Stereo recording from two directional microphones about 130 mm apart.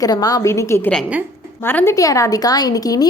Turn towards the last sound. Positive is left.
turn(degrees=30)  # may be behind; listen again after turning